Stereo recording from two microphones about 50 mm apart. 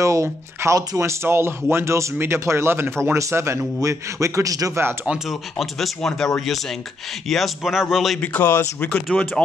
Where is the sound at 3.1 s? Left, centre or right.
Right.